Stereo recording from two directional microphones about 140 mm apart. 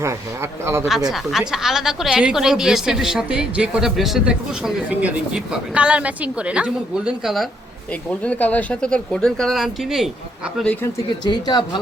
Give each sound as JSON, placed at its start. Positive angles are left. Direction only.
{"t": 0.6, "sound": "speech", "side_deg": -20}
{"t": 1.1, "sound": "a woman's voice", "side_deg": 0}
{"t": 8.2, "sound": "speech", "side_deg": 10}
{"t": 11.3, "sound": "speech", "side_deg": 30}